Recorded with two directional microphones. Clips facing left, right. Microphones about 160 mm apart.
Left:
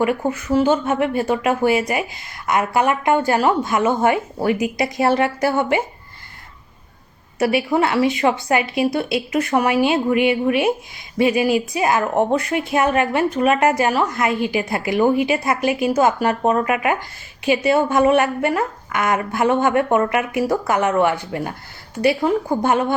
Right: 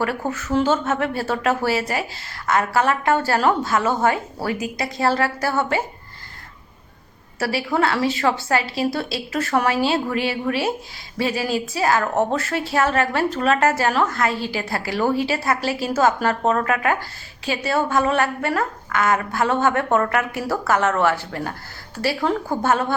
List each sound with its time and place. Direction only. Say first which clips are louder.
0.0 s a woman's voice: left 4 dB; 15° left (ahead or behind)
7.3 s a woman's voice: left 4 dB; 20° left (ahead or behind)